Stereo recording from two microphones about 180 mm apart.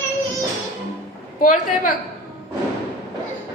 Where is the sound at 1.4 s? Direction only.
50° left (ahead or behind).